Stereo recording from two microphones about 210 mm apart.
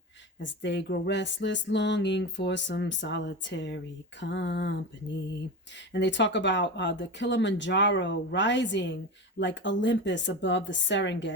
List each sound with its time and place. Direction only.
0.3 s music: 55° left (ahead or behind)
5.9 s music: 55° left (ahead or behind)